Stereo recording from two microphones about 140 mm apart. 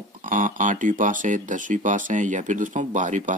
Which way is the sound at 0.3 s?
65° right (ahead or behind).